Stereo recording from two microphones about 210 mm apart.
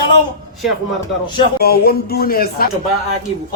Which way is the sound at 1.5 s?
45° left (ahead or behind).